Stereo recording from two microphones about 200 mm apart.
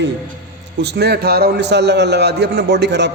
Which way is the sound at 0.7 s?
55° right (ahead or behind).